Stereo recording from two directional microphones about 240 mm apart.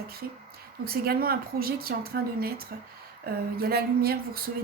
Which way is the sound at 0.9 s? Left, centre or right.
Right.